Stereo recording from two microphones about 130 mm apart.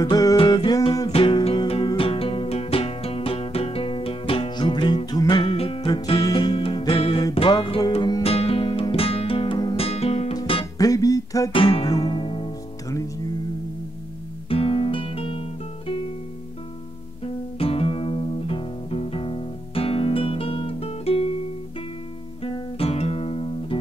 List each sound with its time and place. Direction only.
0.0 s music: 25° left (ahead or behind)
1.1 s music: 45° left (ahead or behind)
9.8 s music: 50° left (ahead or behind)
10.8 s music: 25° left (ahead or behind)
11.5 s guitar: 45° left (ahead or behind)
12.0 s music: 45° left (ahead or behind)
14.5 s guitar: 45° left (ahead or behind)
17.6 s music: 45° left (ahead or behind)
22.4 s guitar: 50° left (ahead or behind)